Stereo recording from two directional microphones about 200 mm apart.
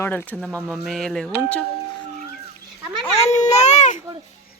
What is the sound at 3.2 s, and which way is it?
Baby cry, 35° left (ahead or behind).